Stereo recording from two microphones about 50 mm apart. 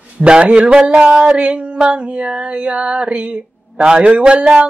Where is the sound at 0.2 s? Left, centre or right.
Right.